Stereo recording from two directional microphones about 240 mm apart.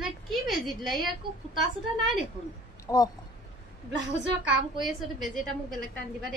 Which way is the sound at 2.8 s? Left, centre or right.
Centre.